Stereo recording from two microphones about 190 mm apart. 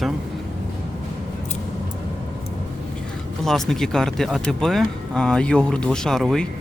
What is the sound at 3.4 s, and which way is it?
Speech, centre (ahead or behind).